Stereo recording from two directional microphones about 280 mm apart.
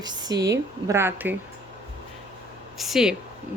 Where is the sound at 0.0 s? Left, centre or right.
Centre.